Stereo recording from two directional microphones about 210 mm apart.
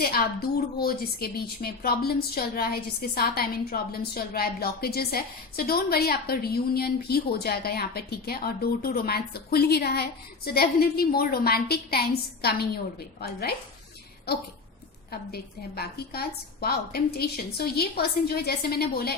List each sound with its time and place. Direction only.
0.0 s a woman's voice: 45° left (ahead or behind)